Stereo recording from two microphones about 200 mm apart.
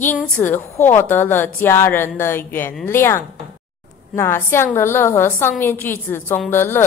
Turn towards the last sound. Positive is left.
turn(degrees=10)  # may be behind; listen again after turning